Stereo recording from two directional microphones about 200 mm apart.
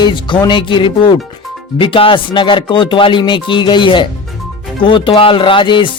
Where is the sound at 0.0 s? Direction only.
25° left (ahead or behind).